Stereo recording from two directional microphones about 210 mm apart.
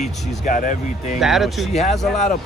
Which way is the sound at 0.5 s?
40° left (ahead or behind).